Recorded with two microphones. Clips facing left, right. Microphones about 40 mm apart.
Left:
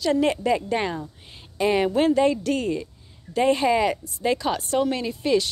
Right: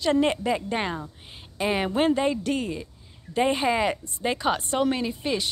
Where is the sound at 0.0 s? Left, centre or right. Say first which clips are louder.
Left 1 dB; centre.